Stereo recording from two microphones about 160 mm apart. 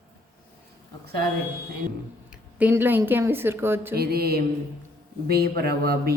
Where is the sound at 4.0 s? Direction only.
75° right (ahead or behind).